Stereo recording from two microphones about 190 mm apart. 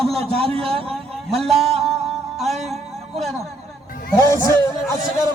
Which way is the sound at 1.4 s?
Centre (ahead or behind).